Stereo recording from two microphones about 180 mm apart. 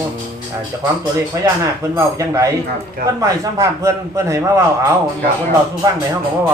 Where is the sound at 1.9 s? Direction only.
15° right (ahead or behind).